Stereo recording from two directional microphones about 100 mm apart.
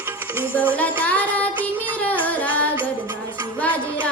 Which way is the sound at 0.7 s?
15° left (ahead or behind).